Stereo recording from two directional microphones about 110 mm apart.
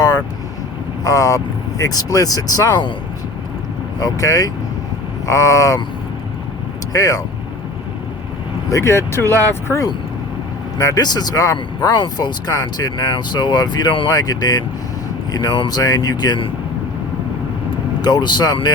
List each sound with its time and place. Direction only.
1.0 s speech: 30° left (ahead or behind)
4.0 s speech: 35° left (ahead or behind)
6.9 s speech: 30° left (ahead or behind)
8.7 s speech: 25° left (ahead or behind); by 16.5 s 40° left (ahead or behind)
18.0 s speech: 40° left (ahead or behind)